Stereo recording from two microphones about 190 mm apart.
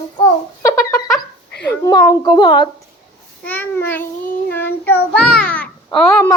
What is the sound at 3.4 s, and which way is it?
A child's voice, 10° left (ahead or behind).